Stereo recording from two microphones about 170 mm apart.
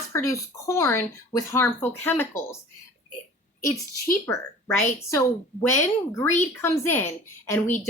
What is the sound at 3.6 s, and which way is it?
Speech, 15° left (ahead or behind).